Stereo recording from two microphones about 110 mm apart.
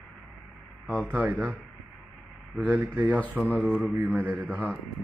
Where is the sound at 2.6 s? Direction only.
15° right (ahead or behind).